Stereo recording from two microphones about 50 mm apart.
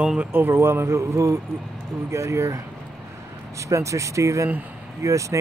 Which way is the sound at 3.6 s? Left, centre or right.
Right.